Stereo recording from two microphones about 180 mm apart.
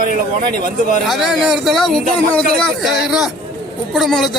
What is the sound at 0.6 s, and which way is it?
Speech, 55° right (ahead or behind).